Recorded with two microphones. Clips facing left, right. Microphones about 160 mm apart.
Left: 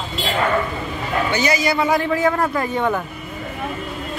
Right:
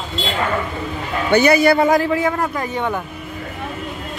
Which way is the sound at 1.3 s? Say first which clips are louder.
Right 10 dB; 60° right (ahead or behind).